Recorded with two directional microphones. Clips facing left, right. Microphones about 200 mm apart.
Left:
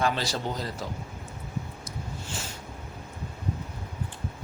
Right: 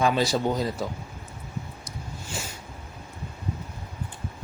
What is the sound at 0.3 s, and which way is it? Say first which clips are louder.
Speech: right 7 dB; 10° right (ahead or behind).